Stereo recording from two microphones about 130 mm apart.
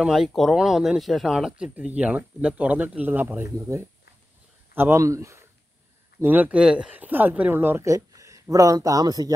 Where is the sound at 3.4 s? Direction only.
25° right (ahead or behind).